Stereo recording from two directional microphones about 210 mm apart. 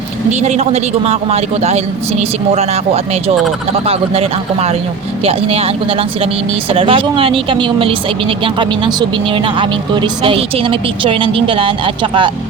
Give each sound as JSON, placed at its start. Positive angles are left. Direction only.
{"t": 0.3, "sound": "a man's voice", "side_deg": -30}